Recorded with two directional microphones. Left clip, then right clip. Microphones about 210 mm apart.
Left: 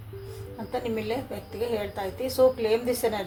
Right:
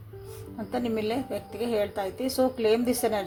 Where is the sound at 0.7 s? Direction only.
50° right (ahead or behind).